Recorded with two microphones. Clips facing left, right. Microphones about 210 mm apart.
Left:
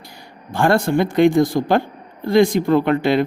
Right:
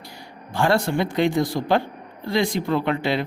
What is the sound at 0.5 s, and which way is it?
A man's voice, 50° left (ahead or behind).